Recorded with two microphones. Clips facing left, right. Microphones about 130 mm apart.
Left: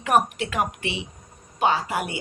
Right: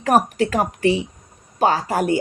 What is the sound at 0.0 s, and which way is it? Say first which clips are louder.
Speech: right 4 dB; 40° right (ahead or behind).